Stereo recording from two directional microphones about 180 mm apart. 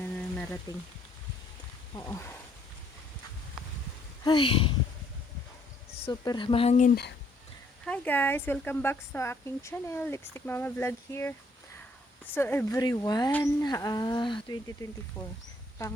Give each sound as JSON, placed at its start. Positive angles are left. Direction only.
{"t": 0.2, "sound": "rain on surface", "side_deg": 5}
{"t": 2.0, "sound": "speech", "side_deg": 15}
{"t": 4.2, "sound": "speech", "side_deg": 25}
{"t": 6.0, "sound": "speech", "side_deg": 25}
{"t": 7.9, "sound": "speech", "side_deg": 10}